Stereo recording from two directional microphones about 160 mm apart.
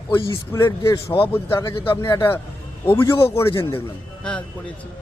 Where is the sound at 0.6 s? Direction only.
30° left (ahead or behind).